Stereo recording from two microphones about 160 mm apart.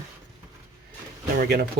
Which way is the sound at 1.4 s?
80° right.